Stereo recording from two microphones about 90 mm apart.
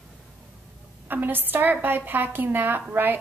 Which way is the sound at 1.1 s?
20° right (ahead or behind).